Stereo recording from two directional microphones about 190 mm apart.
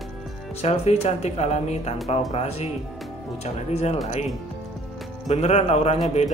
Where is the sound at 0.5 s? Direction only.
35° left (ahead or behind).